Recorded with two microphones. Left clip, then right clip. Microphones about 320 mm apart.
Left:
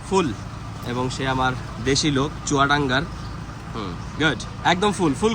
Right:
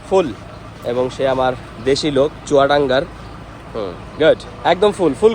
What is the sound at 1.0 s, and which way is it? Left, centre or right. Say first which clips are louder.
A man's voice: right 5 dB; centre.